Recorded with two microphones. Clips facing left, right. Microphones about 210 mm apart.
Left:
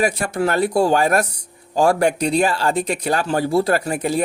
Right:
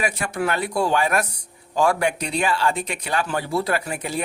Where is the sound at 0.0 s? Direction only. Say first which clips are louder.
Left 5 dB; 40° left (ahead or behind).